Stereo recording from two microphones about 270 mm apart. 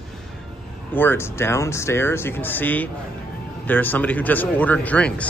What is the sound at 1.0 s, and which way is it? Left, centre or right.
A man's voice, centre.